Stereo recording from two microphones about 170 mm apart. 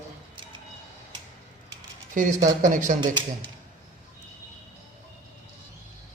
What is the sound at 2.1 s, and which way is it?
Speech, 50° right (ahead or behind).